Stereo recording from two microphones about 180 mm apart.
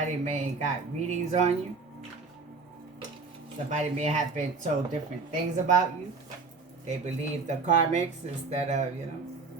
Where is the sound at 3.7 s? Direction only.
40° right (ahead or behind).